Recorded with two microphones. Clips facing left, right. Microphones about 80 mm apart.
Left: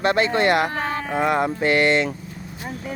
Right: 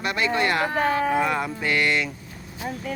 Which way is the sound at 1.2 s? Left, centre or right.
Left.